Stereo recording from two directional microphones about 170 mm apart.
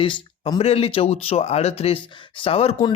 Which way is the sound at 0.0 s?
30° left (ahead or behind).